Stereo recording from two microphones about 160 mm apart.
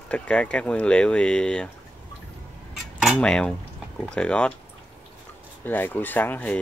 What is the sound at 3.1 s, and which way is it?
Cutlery, 5° left (ahead or behind).